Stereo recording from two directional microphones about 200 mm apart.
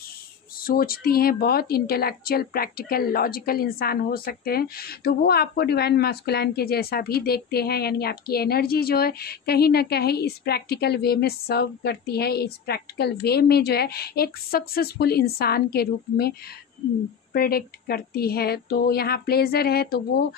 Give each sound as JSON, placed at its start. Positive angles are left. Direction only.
{"t": 0.6, "sound": "speech", "side_deg": 45}